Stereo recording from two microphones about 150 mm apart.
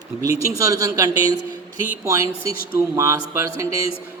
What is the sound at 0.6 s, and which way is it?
Speech, 20° right (ahead or behind).